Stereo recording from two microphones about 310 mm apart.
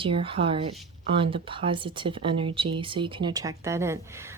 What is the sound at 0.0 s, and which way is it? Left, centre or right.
A woman's voice, centre.